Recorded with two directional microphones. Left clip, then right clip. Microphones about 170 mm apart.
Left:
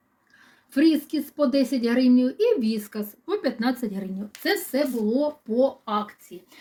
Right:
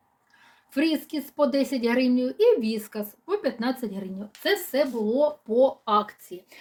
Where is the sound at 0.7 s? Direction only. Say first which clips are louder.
Left 4 dB; 20° right (ahead or behind).